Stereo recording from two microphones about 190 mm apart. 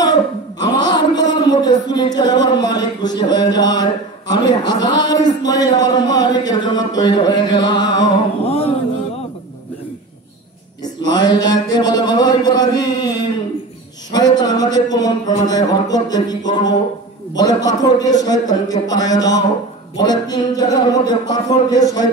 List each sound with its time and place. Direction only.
0.0 s a man's voice: 20° left (ahead or behind)
10.8 s a man's voice: 20° left (ahead or behind)